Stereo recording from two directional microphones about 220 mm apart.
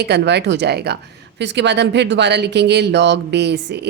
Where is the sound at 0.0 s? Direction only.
50° right (ahead or behind).